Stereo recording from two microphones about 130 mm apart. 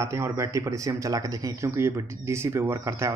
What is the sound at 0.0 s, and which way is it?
Speech, 25° right (ahead or behind).